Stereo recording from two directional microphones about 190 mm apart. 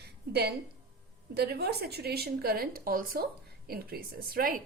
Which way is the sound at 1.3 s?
55° right (ahead or behind).